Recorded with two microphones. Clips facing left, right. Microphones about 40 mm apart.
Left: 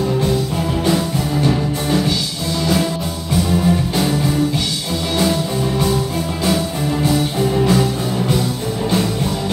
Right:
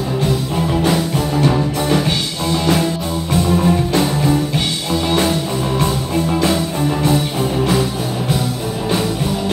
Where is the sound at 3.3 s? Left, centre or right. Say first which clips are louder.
Right 1 dB; right.